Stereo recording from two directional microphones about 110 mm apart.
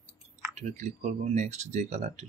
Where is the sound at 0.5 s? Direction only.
90° right.